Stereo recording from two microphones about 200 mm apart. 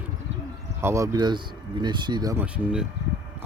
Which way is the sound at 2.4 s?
5° right (ahead or behind).